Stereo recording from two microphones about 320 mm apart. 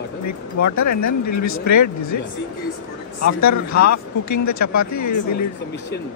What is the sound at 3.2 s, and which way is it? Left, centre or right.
Speech, left.